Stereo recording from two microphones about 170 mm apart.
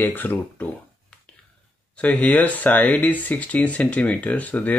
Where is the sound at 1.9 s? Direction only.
10° left (ahead or behind).